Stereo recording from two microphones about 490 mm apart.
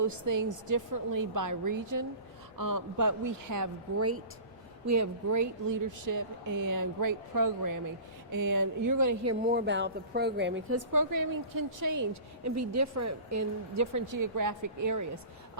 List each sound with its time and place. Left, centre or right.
0.0 s speech: right
9.5 s speech: right